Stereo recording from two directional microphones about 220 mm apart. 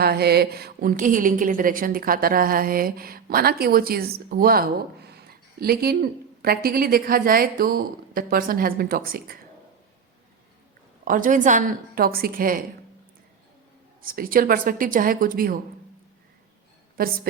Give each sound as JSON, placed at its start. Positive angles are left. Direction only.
{"t": 0.0, "sound": "a woman's voice", "side_deg": -45}
{"t": 11.0, "sound": "a woman's voice", "side_deg": -40}
{"t": 14.0, "sound": "a woman's voice", "side_deg": -40}